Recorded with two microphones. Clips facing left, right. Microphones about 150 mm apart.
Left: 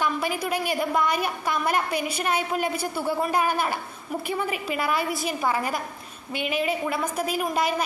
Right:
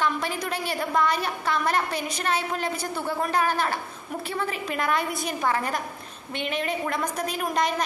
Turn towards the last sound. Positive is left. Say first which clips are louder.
# left 1 dB
turn(degrees=5)  # may be behind; listen again after turning